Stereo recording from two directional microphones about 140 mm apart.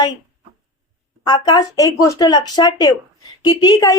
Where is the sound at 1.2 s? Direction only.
30° left (ahead or behind).